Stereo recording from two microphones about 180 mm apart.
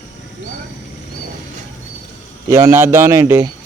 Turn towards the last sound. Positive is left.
turn(degrees=-15)  # may be behind; listen again after turning